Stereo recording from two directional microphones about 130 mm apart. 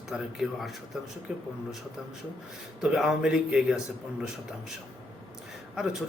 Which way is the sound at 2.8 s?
5° right (ahead or behind).